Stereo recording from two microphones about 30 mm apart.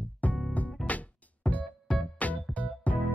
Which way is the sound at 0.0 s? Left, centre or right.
Left.